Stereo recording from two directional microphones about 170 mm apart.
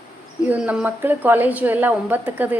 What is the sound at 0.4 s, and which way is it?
A woman's voice, 10° right (ahead or behind).